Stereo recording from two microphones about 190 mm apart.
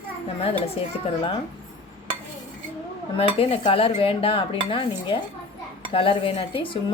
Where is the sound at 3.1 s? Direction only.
30° left (ahead or behind).